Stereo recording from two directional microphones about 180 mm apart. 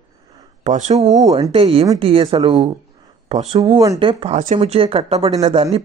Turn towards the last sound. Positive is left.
turn(degrees=-35)  # may be behind; listen again after turning